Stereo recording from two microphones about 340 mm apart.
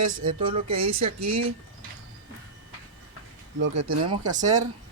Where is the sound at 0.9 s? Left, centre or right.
Right.